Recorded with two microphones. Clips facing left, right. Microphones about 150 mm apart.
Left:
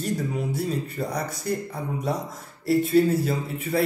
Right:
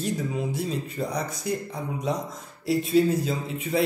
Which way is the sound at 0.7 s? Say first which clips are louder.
Left 1 dB; centre (ahead or behind).